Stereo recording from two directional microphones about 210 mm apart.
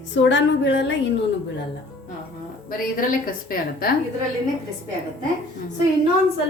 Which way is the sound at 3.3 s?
45° left (ahead or behind).